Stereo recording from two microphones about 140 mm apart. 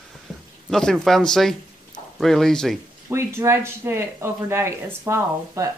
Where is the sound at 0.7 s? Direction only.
5° left (ahead or behind).